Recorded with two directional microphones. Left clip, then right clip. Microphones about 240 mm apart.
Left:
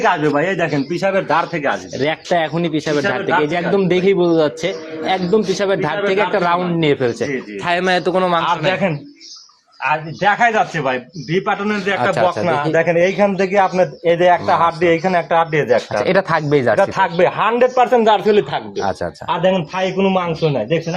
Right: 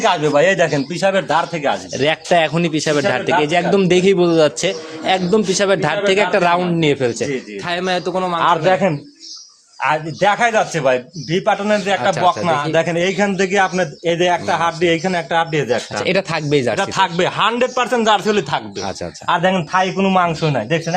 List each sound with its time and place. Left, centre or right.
0.0 s a man's voice: centre
7.6 s a man's voice: centre
8.4 s a man's voice: centre
9.8 s a man's voice: right
12.7 s a man's voice: right
16.0 s speech: centre
16.8 s a man's voice: right